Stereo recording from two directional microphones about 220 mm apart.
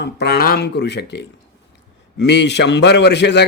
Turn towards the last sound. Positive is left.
turn(degrees=50)  # may be behind; listen again after turning